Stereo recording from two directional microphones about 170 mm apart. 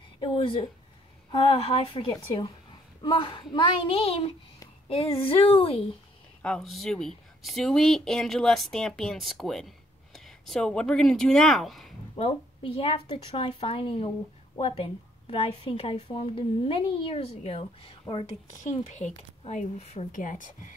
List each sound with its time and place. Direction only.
0.2 s a woman's voice: 30° left (ahead or behind)
6.4 s speech: 5° left (ahead or behind)
12.2 s a woman's voice: 35° left (ahead or behind)
18.6 s speech: 45° left (ahead or behind)